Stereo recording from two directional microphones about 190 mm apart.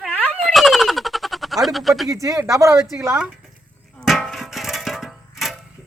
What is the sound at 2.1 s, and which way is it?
A man's voice, 15° right (ahead or behind).